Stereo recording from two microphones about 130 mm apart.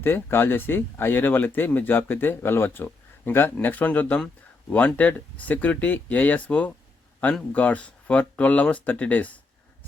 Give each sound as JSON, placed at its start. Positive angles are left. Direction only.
{"t": 0.0, "sound": "speech", "side_deg": 15}